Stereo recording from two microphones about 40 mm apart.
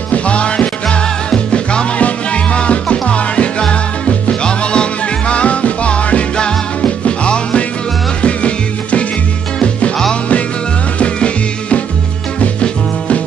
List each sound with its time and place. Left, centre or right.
0.1 s music: left
11.0 s music: left